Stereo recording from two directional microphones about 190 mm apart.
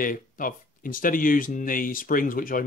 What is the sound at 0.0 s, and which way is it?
Speech, 45° left (ahead or behind).